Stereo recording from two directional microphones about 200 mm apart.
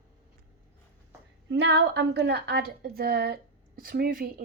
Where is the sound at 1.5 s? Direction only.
60° right (ahead or behind).